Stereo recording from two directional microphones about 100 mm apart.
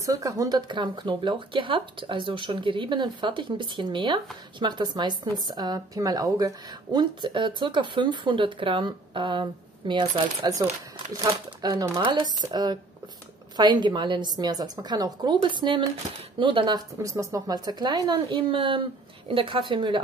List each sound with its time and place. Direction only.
0.0 s speech: 35° right (ahead or behind); by 10.5 s 55° right (ahead or behind)
11.1 s speech: 40° right (ahead or behind)
15.4 s speech: 55° right (ahead or behind)
17.0 s speech: 35° right (ahead or behind); by 20.0 s 55° right (ahead or behind)